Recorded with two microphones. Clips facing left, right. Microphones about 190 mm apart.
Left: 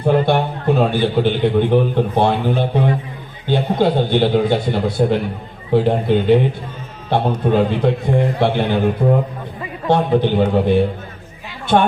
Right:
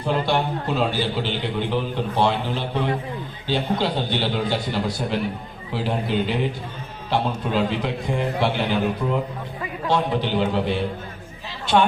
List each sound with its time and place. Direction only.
0.0 s a man's voice: 55° left (ahead or behind)